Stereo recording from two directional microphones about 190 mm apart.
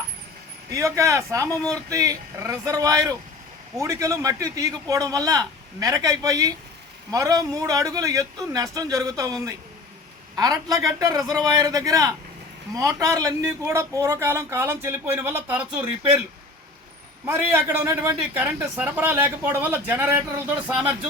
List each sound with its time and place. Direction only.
0.7 s a man's voice: 15° right (ahead or behind)
17.2 s a man's voice: 15° right (ahead or behind)